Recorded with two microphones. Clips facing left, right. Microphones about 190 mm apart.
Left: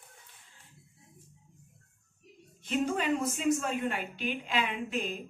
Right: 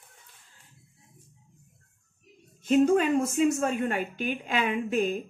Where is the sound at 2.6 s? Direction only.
50° right (ahead or behind).